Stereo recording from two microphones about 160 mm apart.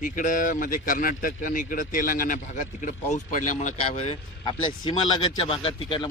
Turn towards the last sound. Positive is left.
turn(degrees=30)  # may be behind; listen again after turning